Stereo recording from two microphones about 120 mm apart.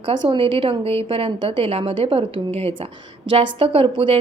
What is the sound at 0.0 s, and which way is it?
A woman's voice, 45° right (ahead or behind).